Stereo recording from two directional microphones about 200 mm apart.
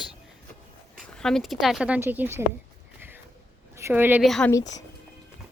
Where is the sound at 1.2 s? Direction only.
Centre (ahead or behind).